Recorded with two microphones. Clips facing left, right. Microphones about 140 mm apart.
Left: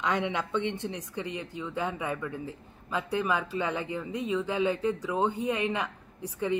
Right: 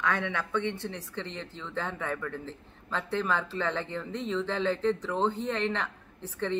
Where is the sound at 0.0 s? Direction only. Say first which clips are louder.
Left 1 dB; 20° left (ahead or behind).